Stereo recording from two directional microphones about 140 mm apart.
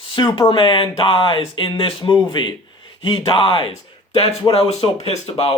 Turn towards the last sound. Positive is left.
turn(degrees=40)  # may be behind; listen again after turning